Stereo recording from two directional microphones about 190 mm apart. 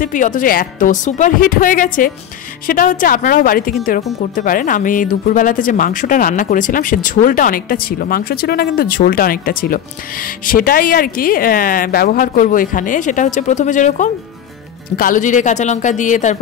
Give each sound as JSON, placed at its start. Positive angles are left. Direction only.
{"t": 0.0, "sound": "speech", "side_deg": 45}